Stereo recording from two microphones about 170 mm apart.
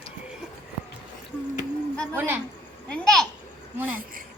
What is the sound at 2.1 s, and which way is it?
Speech, 15° right (ahead or behind).